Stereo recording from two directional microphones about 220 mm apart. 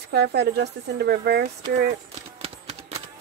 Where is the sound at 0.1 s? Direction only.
50° right (ahead or behind).